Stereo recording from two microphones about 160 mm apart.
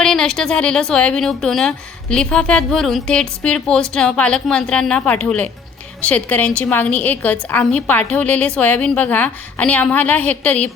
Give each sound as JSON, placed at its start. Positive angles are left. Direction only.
{"t": 0.0, "sound": "a woman's voice", "side_deg": 5}